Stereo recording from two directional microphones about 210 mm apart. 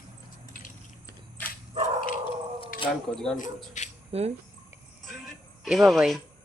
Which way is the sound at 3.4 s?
35° left (ahead or behind).